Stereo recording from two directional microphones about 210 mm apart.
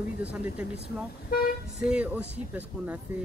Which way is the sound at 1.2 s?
45° left (ahead or behind).